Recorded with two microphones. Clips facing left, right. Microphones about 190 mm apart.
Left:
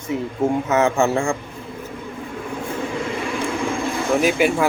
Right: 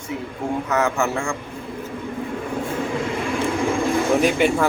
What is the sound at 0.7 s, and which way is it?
Speech, 25° left (ahead or behind).